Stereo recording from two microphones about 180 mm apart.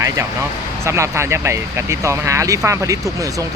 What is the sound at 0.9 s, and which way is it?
Speech, 15° right (ahead or behind).